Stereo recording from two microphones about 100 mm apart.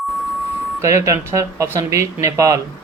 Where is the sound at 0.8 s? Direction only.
30° right (ahead or behind).